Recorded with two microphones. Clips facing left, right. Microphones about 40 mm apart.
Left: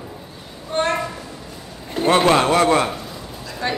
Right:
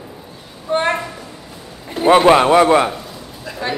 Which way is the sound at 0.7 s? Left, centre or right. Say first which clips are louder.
Right 3 dB; right.